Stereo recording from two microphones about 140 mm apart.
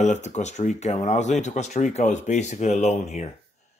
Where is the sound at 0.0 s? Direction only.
55° left (ahead or behind).